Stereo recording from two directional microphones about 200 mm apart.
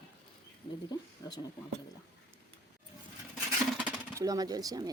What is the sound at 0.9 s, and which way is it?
Speech, 20° left (ahead or behind).